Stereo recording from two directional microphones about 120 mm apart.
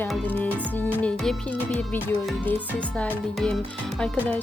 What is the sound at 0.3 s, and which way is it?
Music, 15° left (ahead or behind).